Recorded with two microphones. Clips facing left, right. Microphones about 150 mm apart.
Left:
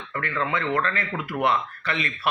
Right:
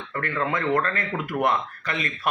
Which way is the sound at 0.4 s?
45° right (ahead or behind).